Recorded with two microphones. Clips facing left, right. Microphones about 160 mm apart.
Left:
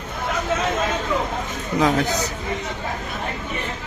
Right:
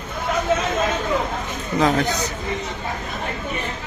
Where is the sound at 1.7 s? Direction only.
5° left (ahead or behind).